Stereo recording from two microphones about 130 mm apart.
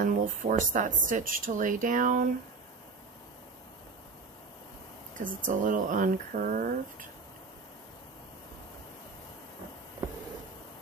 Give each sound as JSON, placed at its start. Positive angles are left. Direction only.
{"t": 0.0, "sound": "speech", "side_deg": -90}
{"t": 5.1, "sound": "speech", "side_deg": -90}